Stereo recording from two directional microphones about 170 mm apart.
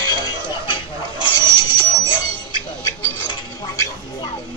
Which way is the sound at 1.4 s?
25° left (ahead or behind).